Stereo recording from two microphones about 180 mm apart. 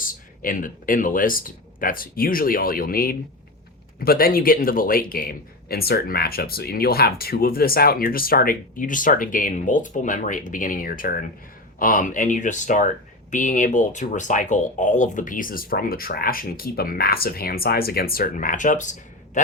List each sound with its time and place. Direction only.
0.0 s speech: 50° left (ahead or behind)